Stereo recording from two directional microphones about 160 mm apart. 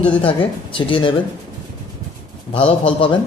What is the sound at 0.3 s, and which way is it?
Speech, 30° left (ahead or behind).